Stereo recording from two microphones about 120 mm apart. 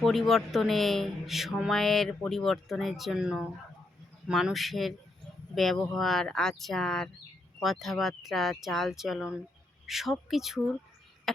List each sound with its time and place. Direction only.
0.0 s speech: centre (ahead or behind)
11.3 s chop: centre (ahead or behind)